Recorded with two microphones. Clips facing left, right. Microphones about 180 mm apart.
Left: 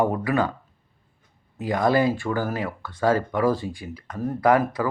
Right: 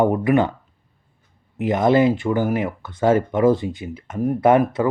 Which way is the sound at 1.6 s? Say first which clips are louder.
Right 5 dB; 20° right (ahead or behind).